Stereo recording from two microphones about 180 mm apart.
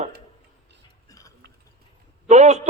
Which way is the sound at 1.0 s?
20° left (ahead or behind).